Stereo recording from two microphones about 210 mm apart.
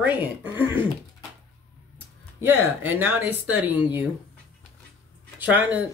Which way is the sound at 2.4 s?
10° right (ahead or behind).